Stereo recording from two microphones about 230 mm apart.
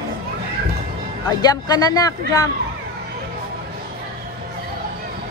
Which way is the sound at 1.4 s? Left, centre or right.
Centre.